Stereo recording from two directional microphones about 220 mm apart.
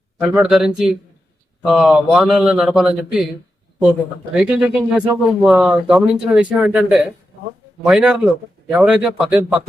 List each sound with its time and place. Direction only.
0.2 s speech: centre (ahead or behind)
4.4 s speech: 5° right (ahead or behind)